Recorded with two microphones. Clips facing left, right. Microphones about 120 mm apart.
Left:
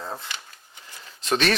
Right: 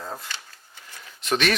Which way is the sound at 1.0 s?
35° left (ahead or behind).